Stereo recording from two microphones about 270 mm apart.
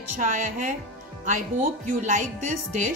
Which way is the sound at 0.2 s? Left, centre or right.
Right.